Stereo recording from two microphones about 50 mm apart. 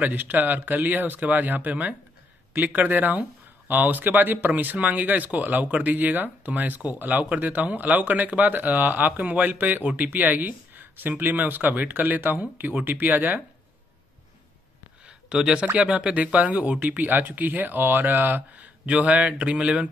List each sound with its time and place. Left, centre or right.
0.0 s speech: right
15.0 s a sound: centre
15.7 s speech: right